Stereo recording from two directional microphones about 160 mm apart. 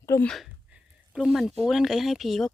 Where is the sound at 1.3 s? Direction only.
Centre (ahead or behind).